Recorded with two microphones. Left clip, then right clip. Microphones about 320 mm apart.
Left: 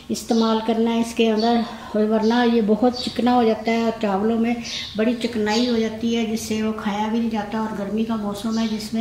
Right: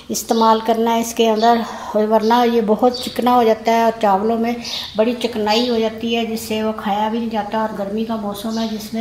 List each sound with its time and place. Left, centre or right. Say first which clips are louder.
0.3 s a woman's voice: right 7 dB; right
0.8 s a woman's voice: right 5 dB; centre
1.4 s a woman's voice: right 6 dB; right
3.3 s a woman's voice: right 5 dB; centre
5.0 s a woman's voice: right 4 dB; centre